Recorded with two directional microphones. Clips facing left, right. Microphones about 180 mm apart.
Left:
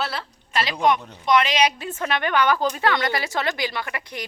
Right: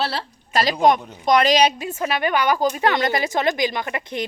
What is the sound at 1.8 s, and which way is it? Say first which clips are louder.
Speech: right 3 dB; 10° right (ahead or behind).